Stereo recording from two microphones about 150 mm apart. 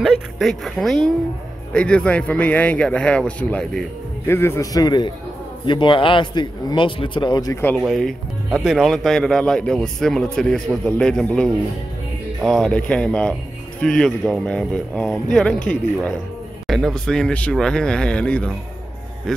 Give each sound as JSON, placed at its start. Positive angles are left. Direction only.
{"t": 0.0, "sound": "a man's voice", "side_deg": 0}
{"t": 7.8, "sound": "speech", "side_deg": 0}